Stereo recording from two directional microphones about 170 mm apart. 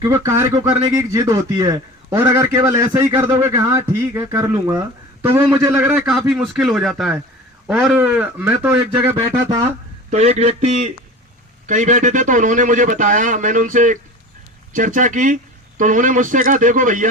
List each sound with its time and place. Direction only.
0.0 s a man's voice: 15° right (ahead or behind)
6.1 s a man's voice: centre (ahead or behind)
10.1 s a man's voice: 40° right (ahead or behind)